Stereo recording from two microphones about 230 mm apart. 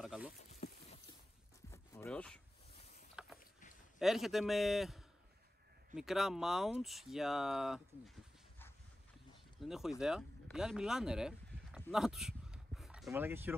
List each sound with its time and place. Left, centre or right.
0.0 s a sound: centre
0.4 s boat: left
1.7 s zipper: centre
3.2 s mechanisms: centre
4.0 s speech: centre
9.6 s speech: centre